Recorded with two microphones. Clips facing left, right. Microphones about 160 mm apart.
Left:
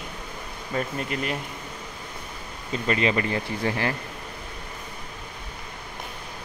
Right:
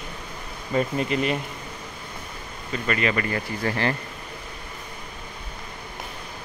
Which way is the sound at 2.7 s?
25° left (ahead or behind).